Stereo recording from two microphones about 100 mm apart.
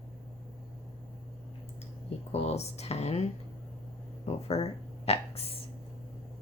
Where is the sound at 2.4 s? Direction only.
90° left.